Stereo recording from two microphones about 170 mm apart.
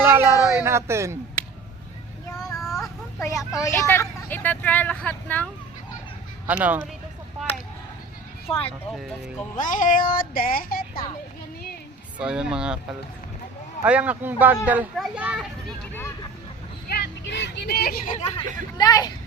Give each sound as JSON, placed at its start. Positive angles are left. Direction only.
{"t": 0.0, "sound": "a sound", "side_deg": -15}
{"t": 0.6, "sound": "a child's voice", "side_deg": -15}
{"t": 2.4, "sound": "child singing", "side_deg": 0}
{"t": 3.2, "sound": "speech", "side_deg": 15}
{"t": 6.5, "sound": "a child's voice", "side_deg": -10}
{"t": 8.5, "sound": "speech", "side_deg": 5}
{"t": 9.6, "sound": "music", "side_deg": 50}
{"t": 12.2, "sound": "speech", "side_deg": -5}
{"t": 13.8, "sound": "a child's voice", "side_deg": -10}
{"t": 16.9, "sound": "speech", "side_deg": 90}
{"t": 18.8, "sound": "speech", "side_deg": 20}